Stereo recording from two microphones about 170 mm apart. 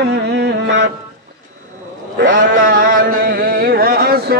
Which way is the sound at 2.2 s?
90° right.